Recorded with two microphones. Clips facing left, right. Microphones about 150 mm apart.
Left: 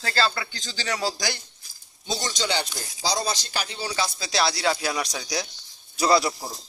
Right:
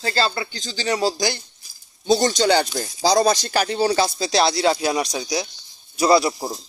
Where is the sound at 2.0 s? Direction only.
55° right (ahead or behind).